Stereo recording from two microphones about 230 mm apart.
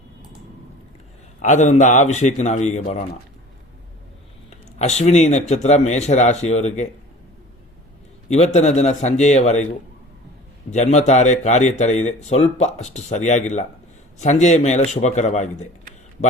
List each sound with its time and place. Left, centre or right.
1.4 s speech: left
4.8 s speech: left
8.3 s speech: left
10.7 s speech: left